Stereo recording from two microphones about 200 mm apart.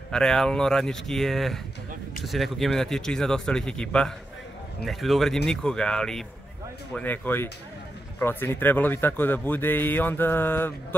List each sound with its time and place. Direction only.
0.1 s a man's voice: 5° left (ahead or behind)